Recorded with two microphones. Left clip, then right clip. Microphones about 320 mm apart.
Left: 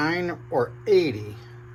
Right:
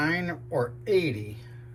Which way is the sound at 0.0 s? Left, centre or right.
Left.